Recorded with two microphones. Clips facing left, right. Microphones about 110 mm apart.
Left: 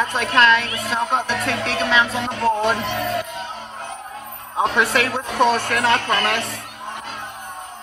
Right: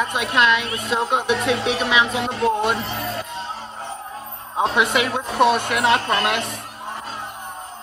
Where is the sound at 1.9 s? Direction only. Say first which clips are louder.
Left 1 dB; 10° right (ahead or behind).